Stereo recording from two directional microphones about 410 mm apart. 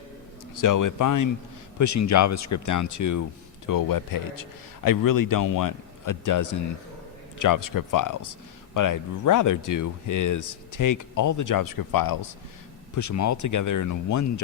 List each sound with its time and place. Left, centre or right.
0.5 s speech: left
13.0 s speech: left